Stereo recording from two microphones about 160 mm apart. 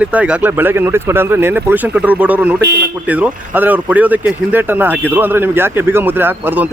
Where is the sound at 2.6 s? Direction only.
90° right.